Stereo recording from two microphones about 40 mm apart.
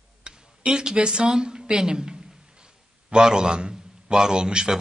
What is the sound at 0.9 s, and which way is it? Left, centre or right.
A woman's voice, right.